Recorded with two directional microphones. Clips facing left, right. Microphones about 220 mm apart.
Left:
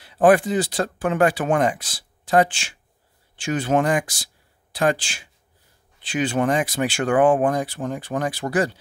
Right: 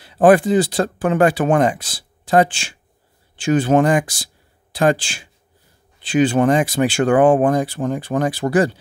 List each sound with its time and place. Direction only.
0.0 s speech: 30° right (ahead or behind)